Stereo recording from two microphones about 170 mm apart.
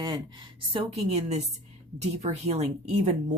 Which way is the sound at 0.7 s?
40° right (ahead or behind).